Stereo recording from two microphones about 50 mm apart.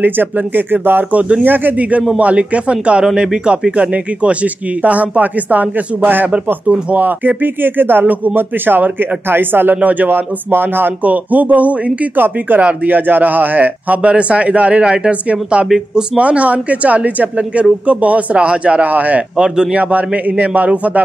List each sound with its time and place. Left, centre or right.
0.0 s a man's voice: right
6.3 s a man's voice: right
7.1 s speech: right
9.8 s a man's voice: right
15.7 s speech: centre
16.2 s a man's voice: right
19.3 s speech: centre
19.8 s speech: right